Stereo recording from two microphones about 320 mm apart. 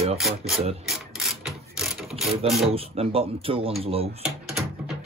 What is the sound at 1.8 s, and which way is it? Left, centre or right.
Ratchet, centre.